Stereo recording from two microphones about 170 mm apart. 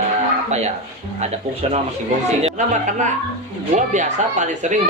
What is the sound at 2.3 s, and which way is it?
Speech, 40° right (ahead or behind).